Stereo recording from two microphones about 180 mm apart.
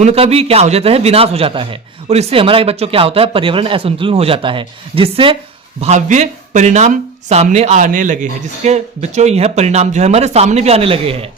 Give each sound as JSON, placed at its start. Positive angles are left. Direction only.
{"t": 0.0, "sound": "speech", "side_deg": -35}